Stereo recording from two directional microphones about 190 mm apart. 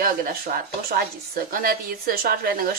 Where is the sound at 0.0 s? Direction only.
50° right (ahead or behind).